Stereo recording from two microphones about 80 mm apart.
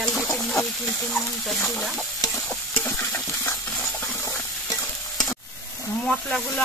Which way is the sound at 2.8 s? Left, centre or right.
Left.